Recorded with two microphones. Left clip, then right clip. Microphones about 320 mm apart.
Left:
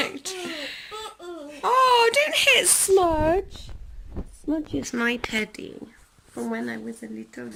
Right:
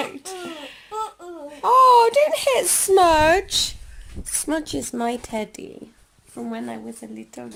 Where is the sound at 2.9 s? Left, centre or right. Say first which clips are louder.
Right 6 dB; right.